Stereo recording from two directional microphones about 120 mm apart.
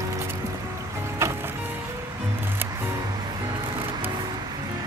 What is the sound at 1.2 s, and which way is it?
Music, 20° right (ahead or behind).